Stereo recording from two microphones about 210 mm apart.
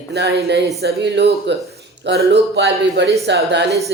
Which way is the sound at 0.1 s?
50° right (ahead or behind).